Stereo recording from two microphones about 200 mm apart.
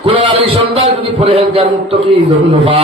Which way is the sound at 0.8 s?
25° right (ahead or behind).